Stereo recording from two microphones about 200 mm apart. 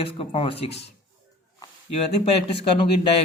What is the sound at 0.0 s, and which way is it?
Speech, 25° left (ahead or behind).